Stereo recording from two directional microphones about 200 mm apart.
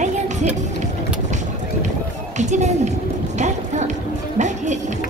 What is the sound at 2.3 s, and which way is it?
Speech, 35° right (ahead or behind).